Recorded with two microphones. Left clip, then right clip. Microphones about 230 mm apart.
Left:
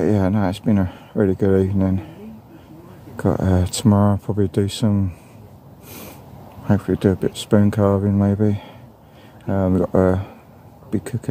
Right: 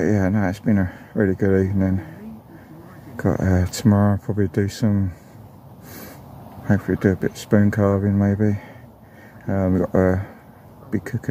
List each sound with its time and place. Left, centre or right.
0.0 s speech: centre
3.2 s speech: centre
6.7 s speech: centre